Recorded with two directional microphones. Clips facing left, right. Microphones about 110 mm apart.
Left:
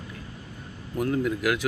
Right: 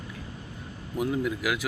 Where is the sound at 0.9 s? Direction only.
5° right (ahead or behind).